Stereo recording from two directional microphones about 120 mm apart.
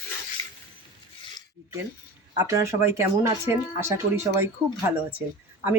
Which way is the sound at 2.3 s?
25° right (ahead or behind).